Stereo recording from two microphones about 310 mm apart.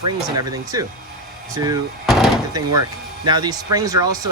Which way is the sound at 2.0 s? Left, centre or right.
Centre.